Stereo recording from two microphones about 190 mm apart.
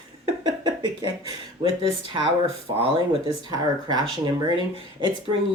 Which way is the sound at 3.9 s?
20° right (ahead or behind).